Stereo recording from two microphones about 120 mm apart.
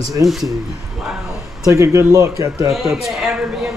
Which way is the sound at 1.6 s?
25° right (ahead or behind).